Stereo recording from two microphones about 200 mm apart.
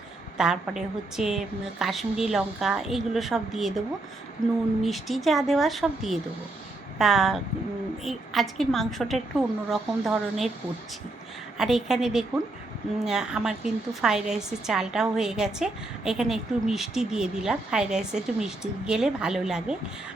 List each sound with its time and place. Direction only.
0.3 s a woman's voice: 5° right (ahead or behind)
11.5 s a woman's voice: centre (ahead or behind)